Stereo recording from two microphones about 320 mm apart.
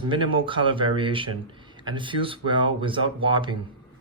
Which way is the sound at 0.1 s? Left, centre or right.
Centre.